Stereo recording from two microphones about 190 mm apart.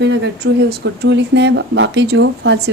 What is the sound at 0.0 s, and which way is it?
Speech, 65° right (ahead or behind).